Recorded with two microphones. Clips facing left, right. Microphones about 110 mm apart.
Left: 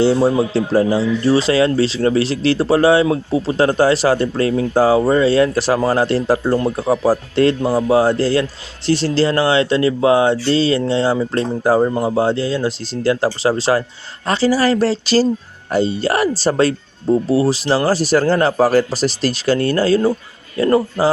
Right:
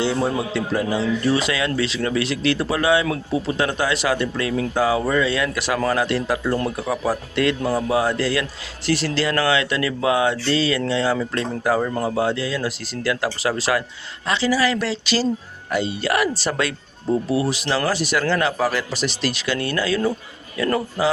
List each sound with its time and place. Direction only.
0.0 s speech: 35° left (ahead or behind)
14.3 s speech: 40° left (ahead or behind)